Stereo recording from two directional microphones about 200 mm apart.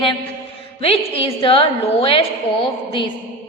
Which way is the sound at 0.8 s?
30° left (ahead or behind).